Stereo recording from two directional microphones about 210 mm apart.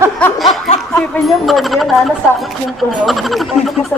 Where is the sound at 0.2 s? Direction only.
10° left (ahead or behind).